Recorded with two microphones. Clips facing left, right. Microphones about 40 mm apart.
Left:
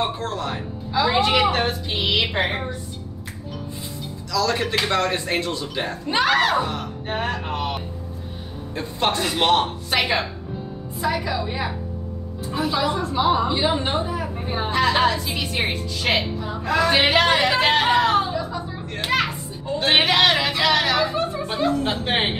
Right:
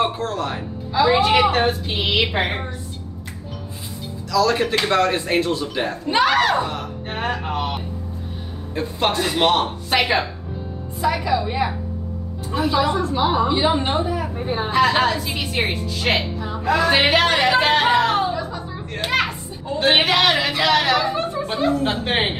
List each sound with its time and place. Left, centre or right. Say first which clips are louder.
0.0 s a woman's voice: right 3 dB; centre
4.3 s a woman's voice: right 4 dB; centre